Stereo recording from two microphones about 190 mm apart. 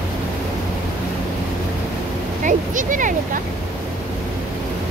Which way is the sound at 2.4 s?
45° right (ahead or behind).